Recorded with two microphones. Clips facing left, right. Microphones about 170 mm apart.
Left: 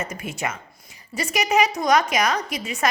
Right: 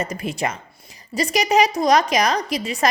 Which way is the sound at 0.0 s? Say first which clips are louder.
Right 4 dB; 35° right (ahead or behind).